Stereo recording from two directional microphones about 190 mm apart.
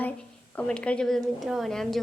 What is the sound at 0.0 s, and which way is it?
A woman's voice, 5° left (ahead or behind).